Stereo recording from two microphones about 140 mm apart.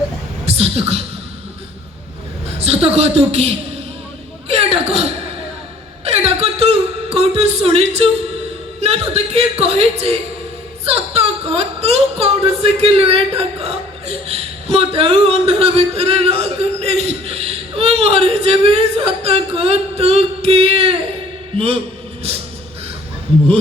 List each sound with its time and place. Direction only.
0.4 s speech: 45° right (ahead or behind)
2.6 s speech: 45° right (ahead or behind)
4.4 s a sound: 45° right (ahead or behind)
6.1 s speech: 45° right (ahead or behind)